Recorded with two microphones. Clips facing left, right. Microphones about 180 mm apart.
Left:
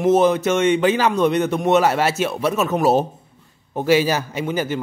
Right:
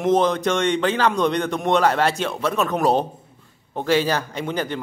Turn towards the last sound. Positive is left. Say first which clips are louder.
# left 3 dB
turn(degrees=5)  # may be behind; listen again after turning